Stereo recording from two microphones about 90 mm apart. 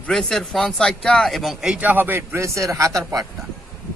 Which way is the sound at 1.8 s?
20° right (ahead or behind).